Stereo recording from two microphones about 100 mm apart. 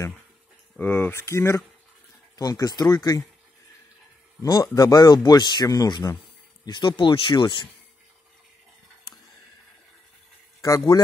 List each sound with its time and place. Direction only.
0.7 s speech: 20° left (ahead or behind)
2.3 s speech: 40° left (ahead or behind)
4.4 s speech: 35° left (ahead or behind); by 7.6 s 55° left (ahead or behind)
10.6 s a man's voice: 35° left (ahead or behind)